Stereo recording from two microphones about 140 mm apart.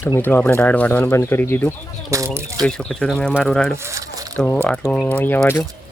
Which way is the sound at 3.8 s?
20° right (ahead or behind).